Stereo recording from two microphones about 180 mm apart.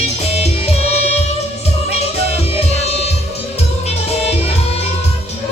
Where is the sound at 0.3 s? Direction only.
35° left (ahead or behind).